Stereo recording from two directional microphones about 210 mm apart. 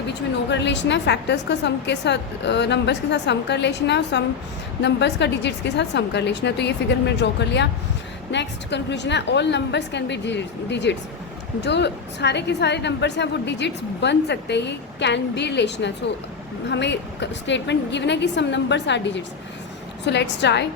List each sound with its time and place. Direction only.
0.1 s a woman's voice: 55° left (ahead or behind)